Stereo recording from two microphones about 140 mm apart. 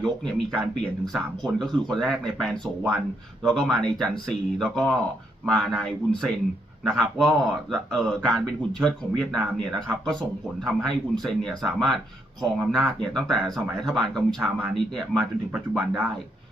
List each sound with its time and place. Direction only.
0.0 s speech: 5° left (ahead or behind)